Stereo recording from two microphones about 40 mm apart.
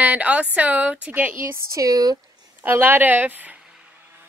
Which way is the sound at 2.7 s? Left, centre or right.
Right.